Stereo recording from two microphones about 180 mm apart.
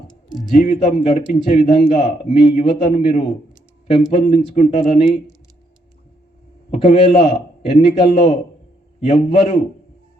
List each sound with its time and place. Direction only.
0.5 s a man's voice: 40° left (ahead or behind)
6.7 s a man's voice: 35° left (ahead or behind)